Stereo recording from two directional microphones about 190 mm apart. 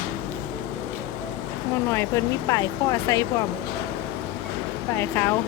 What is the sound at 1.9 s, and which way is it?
Speech, 15° left (ahead or behind).